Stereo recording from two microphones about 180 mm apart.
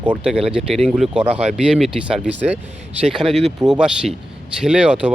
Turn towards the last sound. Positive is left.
turn(degrees=-5)  # may be behind; listen again after turning